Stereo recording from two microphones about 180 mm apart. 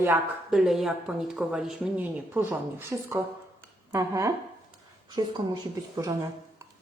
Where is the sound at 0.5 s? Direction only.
Centre (ahead or behind); by 6.2 s 20° right (ahead or behind).